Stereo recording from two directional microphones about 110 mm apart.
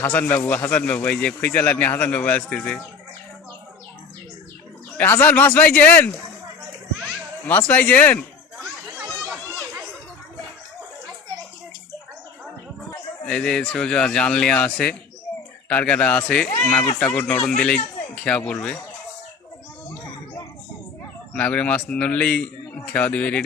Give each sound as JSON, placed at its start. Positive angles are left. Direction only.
{"t": 0.0, "sound": "a man's voice", "side_deg": 15}
{"t": 4.9, "sound": "a man's voice", "side_deg": 15}
{"t": 7.4, "sound": "a man's voice", "side_deg": 15}
{"t": 12.9, "sound": "a man's voice", "side_deg": 10}
{"t": 21.3, "sound": "a man's voice", "side_deg": 10}